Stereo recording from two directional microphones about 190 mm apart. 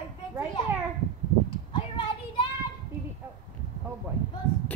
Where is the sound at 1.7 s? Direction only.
25° left (ahead or behind).